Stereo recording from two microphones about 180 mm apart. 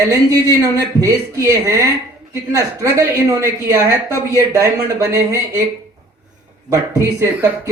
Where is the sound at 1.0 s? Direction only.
15° right (ahead or behind).